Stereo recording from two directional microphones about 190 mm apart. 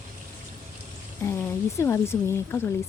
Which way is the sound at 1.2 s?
15° left (ahead or behind).